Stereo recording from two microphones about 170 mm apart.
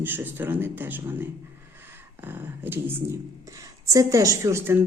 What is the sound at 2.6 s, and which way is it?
A woman's voice, 10° right (ahead or behind).